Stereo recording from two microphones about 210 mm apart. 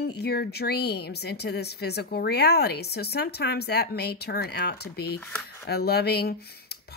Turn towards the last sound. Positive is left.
turn(degrees=50)  # may be behind; listen again after turning